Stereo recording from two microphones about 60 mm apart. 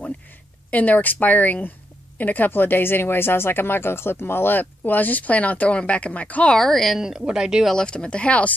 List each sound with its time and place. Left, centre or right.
0.7 s speech: left
6.5 s a woman's voice: centre
7.0 s speech: centre
7.7 s speech: centre